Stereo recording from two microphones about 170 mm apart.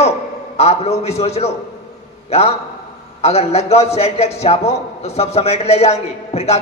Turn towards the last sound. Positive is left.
turn(degrees=40)  # may be behind; listen again after turning